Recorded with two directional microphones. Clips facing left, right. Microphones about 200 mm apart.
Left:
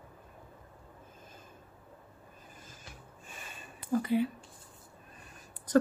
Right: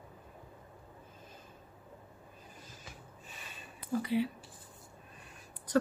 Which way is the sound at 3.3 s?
50° left (ahead or behind).